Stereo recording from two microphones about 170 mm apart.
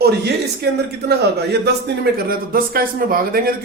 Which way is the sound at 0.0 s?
75° right (ahead or behind).